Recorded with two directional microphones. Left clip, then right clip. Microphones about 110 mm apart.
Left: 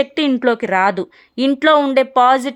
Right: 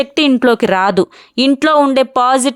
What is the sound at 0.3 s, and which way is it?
A woman's voice, 60° right (ahead or behind).